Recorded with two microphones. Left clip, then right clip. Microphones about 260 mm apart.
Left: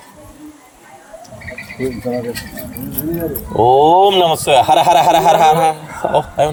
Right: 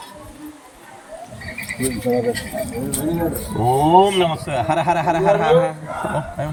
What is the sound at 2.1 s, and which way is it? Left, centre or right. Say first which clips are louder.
Speech: right 3 dB; left.